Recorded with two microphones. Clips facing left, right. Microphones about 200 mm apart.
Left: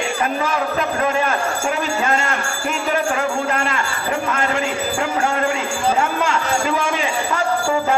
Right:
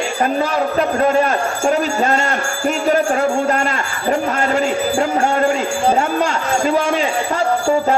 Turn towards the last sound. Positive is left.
turn(degrees=-35)  # may be behind; listen again after turning